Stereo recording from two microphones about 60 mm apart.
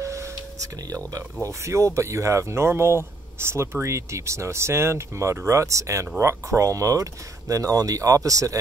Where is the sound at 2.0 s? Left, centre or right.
Right.